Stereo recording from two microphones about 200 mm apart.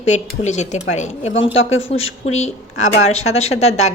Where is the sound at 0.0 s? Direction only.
35° left (ahead or behind).